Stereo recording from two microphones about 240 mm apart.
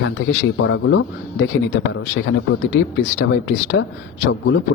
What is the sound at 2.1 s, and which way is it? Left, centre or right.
Speech, left.